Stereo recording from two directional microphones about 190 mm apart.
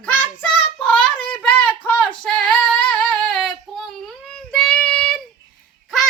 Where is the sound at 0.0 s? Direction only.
10° left (ahead or behind).